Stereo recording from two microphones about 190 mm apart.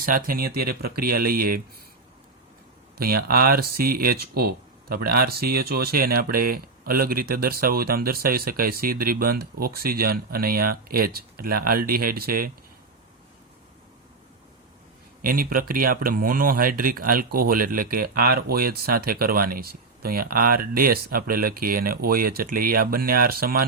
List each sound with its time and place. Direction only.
0.0 s speech: 50° right (ahead or behind)
3.0 s speech: 50° right (ahead or behind)
15.2 s speech: 50° right (ahead or behind)